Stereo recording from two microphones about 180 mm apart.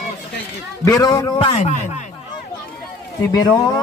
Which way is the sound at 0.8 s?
20° left (ahead or behind).